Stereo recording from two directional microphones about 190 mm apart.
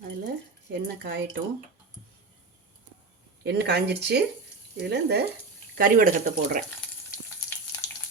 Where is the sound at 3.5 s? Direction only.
60° right (ahead or behind).